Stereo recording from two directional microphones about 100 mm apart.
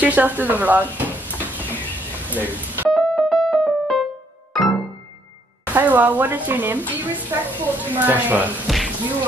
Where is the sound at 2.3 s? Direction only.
15° right (ahead or behind).